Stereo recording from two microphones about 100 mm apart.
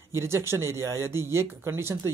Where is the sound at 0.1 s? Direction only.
25° right (ahead or behind).